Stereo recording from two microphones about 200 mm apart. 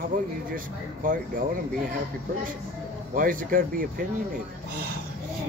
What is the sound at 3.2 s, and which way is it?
Speech, 45° right (ahead or behind).